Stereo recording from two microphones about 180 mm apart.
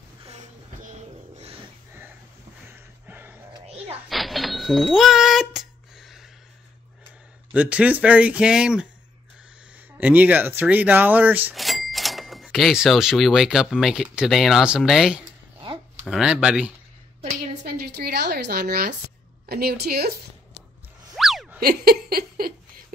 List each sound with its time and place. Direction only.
0.2 s a sound: 35° right (ahead or behind)
3.1 s music: 10° right (ahead or behind)
4.1 s cash register: centre (ahead or behind)
7.5 s speech: 5° right (ahead or behind)
9.9 s speech: 10° right (ahead or behind)
15.6 s a sound: 30° right (ahead or behind)
16.1 s speech: 5° right (ahead or behind)
17.6 s a woman's voice: 65° right (ahead or behind)
21.2 s boing: centre (ahead or behind)
21.5 s laughter: 60° right (ahead or behind)